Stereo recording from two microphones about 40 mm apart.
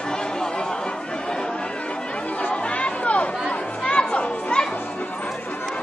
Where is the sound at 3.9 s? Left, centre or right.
Left.